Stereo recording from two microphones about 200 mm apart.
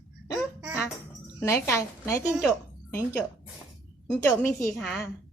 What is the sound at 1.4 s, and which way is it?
Speech, 15° left (ahead or behind).